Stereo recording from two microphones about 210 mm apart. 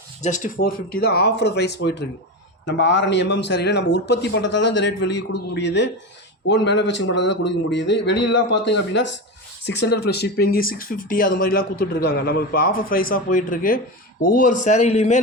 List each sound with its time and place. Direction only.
0.2 s speech: 35° left (ahead or behind)